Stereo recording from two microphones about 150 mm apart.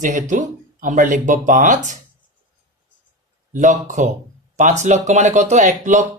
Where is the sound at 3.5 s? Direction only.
55° right (ahead or behind).